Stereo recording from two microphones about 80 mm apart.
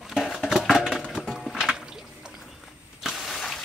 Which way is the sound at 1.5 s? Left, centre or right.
Centre.